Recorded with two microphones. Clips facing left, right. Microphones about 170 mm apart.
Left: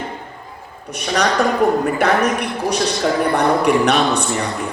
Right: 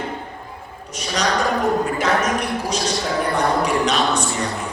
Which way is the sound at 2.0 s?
60° left (ahead or behind).